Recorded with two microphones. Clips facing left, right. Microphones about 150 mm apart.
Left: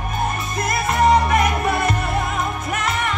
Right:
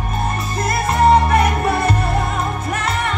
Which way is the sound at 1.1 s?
30° right (ahead or behind).